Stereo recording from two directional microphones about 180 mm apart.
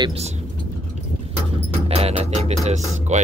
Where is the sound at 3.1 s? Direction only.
40° right (ahead or behind).